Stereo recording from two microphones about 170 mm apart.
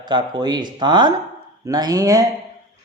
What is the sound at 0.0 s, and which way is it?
Speech, 25° right (ahead or behind).